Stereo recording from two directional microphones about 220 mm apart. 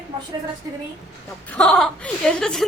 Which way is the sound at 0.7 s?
15° right (ahead or behind).